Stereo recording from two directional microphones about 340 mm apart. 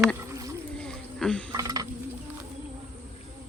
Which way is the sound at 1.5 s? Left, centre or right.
Centre.